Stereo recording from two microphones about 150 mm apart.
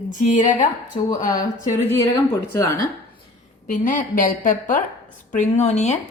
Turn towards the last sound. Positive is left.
turn(degrees=50)  # may be behind; listen again after turning